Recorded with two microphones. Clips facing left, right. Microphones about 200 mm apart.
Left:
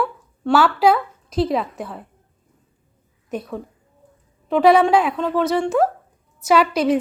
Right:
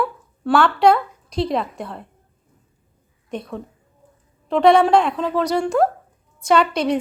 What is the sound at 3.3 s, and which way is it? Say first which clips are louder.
A woman's voice: left 1 dB; 5° left (ahead or behind).